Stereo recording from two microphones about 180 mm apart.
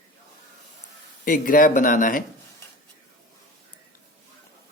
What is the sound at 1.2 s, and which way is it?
Speech, 50° left (ahead or behind).